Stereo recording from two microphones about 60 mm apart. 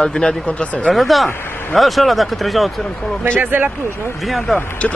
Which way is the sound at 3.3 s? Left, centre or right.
Right.